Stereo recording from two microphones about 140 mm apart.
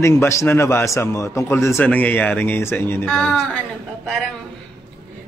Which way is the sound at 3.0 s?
5° left (ahead or behind).